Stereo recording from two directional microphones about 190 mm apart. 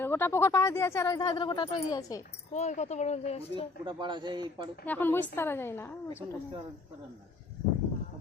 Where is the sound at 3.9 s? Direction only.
25° right (ahead or behind).